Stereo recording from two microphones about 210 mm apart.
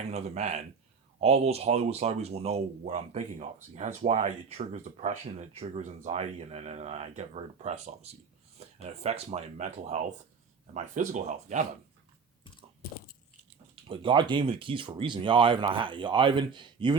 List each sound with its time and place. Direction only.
0.1 s speech: 30° right (ahead or behind)
13.8 s speech: 25° right (ahead or behind)